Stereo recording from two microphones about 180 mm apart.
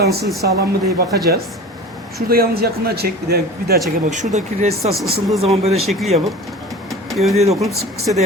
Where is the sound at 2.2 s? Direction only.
55° right (ahead or behind).